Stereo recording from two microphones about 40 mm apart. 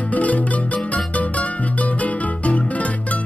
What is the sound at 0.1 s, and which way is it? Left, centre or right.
Music, left.